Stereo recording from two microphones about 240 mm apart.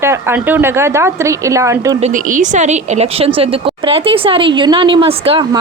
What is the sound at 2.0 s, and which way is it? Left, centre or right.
A woman's voice, right.